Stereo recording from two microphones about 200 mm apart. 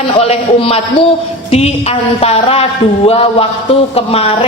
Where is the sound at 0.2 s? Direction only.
30° left (ahead or behind).